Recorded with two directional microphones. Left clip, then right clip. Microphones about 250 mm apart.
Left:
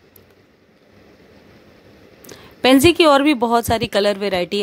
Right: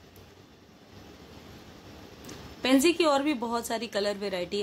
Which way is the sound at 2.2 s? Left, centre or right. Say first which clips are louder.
Left 13 dB; left.